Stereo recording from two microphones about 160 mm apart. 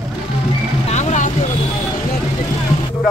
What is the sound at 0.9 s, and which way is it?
Vehicle, 45° left (ahead or behind).